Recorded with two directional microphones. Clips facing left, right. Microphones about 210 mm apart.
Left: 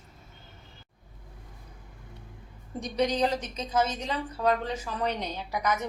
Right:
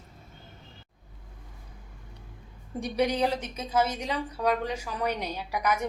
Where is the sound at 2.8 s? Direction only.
10° right (ahead or behind).